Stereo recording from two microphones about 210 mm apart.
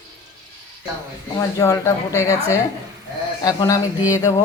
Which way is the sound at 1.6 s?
15° left (ahead or behind).